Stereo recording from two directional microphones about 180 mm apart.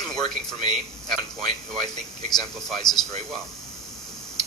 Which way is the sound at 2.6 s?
Centre (ahead or behind).